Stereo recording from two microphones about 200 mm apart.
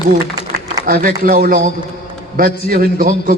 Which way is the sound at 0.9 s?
45° right (ahead or behind).